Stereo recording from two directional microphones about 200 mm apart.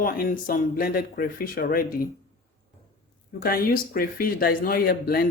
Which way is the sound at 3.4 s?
50° left (ahead or behind).